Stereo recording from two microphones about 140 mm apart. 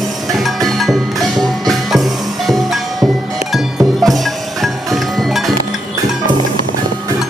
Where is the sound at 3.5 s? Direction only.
Centre (ahead or behind).